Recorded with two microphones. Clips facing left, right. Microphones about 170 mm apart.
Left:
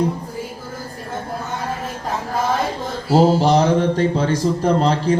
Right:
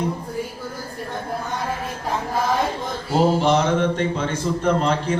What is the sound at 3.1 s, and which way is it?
Speech, 35° left (ahead or behind).